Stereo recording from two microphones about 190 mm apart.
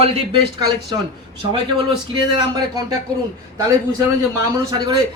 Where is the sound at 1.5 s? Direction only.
25° right (ahead or behind).